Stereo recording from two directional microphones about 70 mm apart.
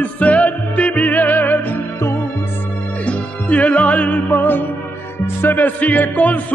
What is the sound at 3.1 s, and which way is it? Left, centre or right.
Music, centre.